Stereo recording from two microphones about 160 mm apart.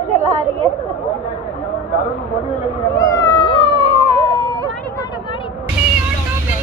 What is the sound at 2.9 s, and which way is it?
Cat, 20° left (ahead or behind).